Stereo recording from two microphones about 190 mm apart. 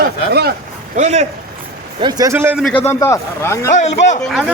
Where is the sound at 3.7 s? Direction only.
40° left (ahead or behind).